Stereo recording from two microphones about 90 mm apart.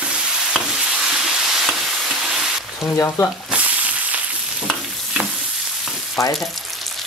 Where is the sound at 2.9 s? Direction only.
35° left (ahead or behind).